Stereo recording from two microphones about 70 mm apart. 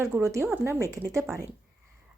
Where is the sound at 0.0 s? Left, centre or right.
Right.